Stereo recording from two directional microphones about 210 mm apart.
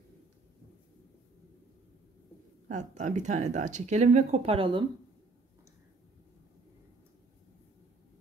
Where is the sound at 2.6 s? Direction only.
35° right (ahead or behind).